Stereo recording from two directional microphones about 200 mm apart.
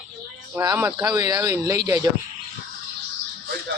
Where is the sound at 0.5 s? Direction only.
15° right (ahead or behind).